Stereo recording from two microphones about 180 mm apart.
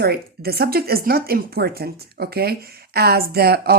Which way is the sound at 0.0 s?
60° right (ahead or behind).